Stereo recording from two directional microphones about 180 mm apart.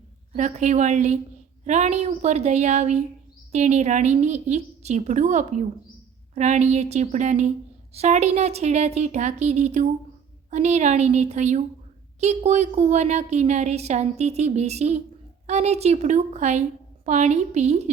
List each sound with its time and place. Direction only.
0.3 s a woman's voice: 40° right (ahead or behind)